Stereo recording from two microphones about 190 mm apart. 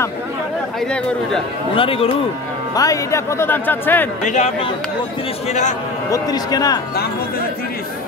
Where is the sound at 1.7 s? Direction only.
30° left (ahead or behind).